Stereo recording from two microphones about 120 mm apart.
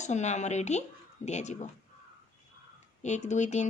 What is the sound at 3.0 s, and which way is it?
Speech, 75° left (ahead or behind).